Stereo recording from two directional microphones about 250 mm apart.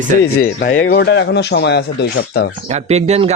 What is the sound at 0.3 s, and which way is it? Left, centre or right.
A man's voice, left.